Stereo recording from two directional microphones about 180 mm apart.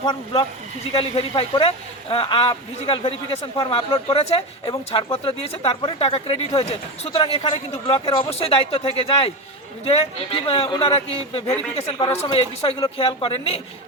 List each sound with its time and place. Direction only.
0.0 s speech: 30° left (ahead or behind)